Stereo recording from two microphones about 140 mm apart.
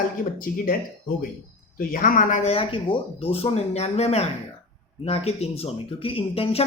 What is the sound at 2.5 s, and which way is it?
Speech, 40° left (ahead or behind).